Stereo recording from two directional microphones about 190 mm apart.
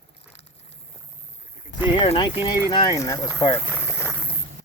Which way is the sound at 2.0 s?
25° left (ahead or behind).